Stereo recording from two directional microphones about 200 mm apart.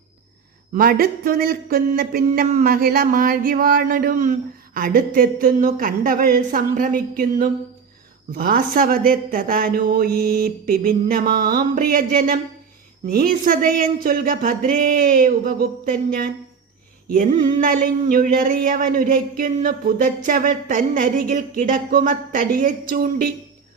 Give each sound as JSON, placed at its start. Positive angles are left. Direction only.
{"t": 0.7, "sound": "speech", "side_deg": -45}
{"t": 17.3, "sound": "speech", "side_deg": -45}